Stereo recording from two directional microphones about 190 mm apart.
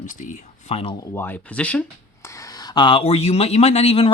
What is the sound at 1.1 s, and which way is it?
Speech, 10° left (ahead or behind).